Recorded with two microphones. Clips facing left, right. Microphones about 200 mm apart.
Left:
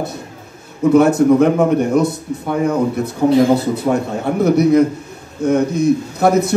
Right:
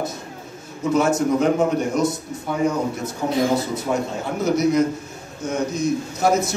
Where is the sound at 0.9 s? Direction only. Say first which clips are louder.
Left 8 dB; 60° left (ahead or behind).